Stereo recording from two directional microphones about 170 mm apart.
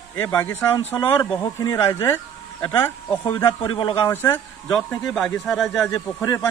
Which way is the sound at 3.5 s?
30° left (ahead or behind).